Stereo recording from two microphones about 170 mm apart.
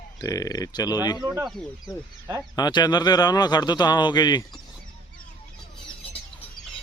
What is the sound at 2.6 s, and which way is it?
A man's voice, 25° left (ahead or behind).